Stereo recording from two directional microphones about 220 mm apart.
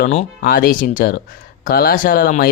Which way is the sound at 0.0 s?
40° left (ahead or behind).